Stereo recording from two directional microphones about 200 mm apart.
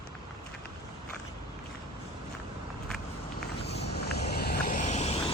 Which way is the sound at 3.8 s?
55° left (ahead or behind).